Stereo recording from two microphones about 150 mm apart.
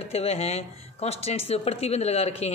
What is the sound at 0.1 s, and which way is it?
A woman's voice, 40° left (ahead or behind).